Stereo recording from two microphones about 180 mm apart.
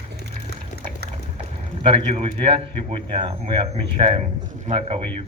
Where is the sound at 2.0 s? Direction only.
30° right (ahead or behind).